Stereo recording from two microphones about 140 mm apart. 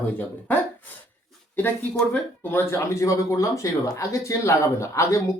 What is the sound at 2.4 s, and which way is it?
Speech, 15° left (ahead or behind).